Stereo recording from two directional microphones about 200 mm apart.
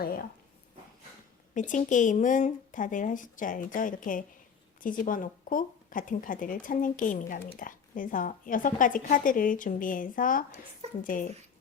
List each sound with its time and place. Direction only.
0.0 s a woman's voice: 45° left (ahead or behind)
1.5 s a woman's voice: 40° left (ahead or behind)